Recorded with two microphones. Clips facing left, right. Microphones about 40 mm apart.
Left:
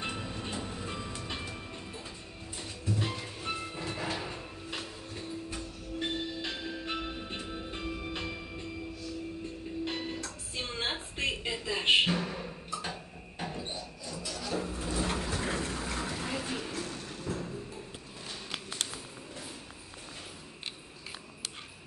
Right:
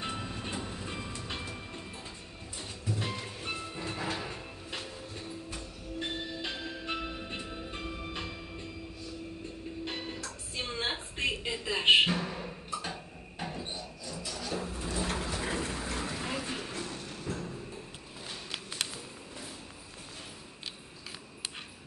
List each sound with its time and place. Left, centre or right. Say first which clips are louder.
0.0 s train: even; centre
3.0 s music: left 1 dB; centre
9.8 s music: left 1 dB; centre
11.6 s music: right 4 dB; centre
12.1 s percussion: left 1 dB; centre
14.1 s a sound: left 2 dB; centre
16.3 s music: left 1 dB; centre